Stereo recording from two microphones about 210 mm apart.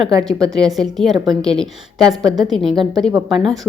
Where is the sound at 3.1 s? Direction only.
20° right (ahead or behind).